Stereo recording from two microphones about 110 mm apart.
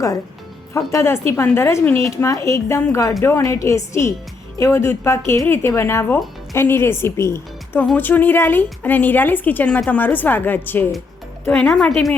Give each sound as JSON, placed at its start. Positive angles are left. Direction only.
{"t": 0.7, "sound": "a woman's voice", "side_deg": 25}
{"t": 11.7, "sound": "a woman's voice", "side_deg": 5}